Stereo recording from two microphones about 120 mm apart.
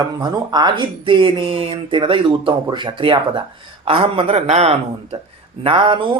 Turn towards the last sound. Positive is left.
turn(degrees=-45)  # may be behind; listen again after turning